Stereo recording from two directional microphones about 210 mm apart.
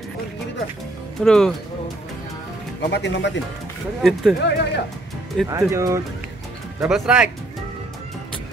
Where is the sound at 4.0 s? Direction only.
Centre (ahead or behind).